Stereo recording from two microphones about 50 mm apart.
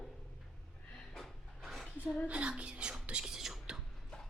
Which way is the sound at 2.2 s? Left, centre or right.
Right.